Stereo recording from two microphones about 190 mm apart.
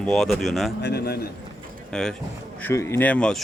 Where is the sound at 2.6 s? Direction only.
15° left (ahead or behind).